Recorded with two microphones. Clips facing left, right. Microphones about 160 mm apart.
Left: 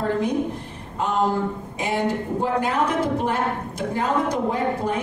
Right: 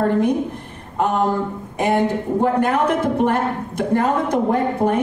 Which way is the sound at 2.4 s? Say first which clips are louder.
Right 5 dB; 55° right (ahead or behind).